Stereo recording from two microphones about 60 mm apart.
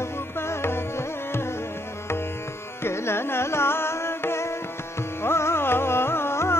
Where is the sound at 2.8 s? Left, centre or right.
Left.